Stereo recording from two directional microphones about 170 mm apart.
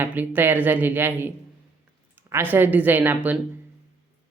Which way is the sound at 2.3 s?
10° right (ahead or behind).